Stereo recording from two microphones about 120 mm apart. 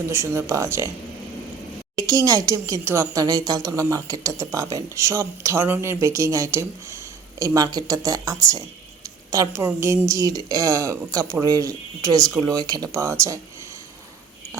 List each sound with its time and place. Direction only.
0.1 s speech: 25° right (ahead or behind)
2.0 s speech: 30° right (ahead or behind)